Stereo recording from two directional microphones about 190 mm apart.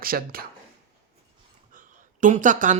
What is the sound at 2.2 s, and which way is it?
Speech, 40° right (ahead or behind).